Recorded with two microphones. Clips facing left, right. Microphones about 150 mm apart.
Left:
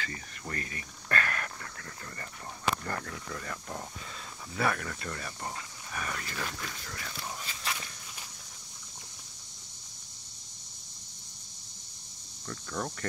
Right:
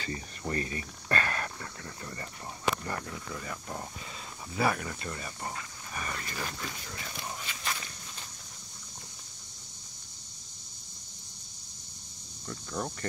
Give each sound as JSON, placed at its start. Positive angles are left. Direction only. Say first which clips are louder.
{"t": 0.0, "sound": "speech", "louder": "right 4 dB", "side_deg": -25}
{"t": 2.8, "sound": "speech", "louder": "even", "side_deg": -5}
{"t": 6.2, "sound": "speech", "louder": "even", "side_deg": -15}
{"t": 7.6, "sound": "walk", "louder": "even", "side_deg": 10}
{"t": 12.4, "sound": "speech", "louder": "even", "side_deg": -10}